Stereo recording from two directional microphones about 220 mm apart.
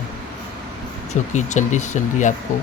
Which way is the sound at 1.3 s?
35° left (ahead or behind).